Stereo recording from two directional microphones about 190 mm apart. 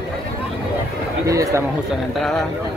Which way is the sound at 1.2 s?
15° right (ahead or behind).